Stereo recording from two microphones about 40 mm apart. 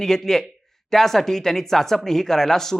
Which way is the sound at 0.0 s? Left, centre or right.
Centre.